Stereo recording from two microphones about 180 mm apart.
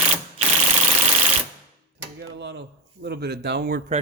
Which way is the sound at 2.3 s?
75° right (ahead or behind).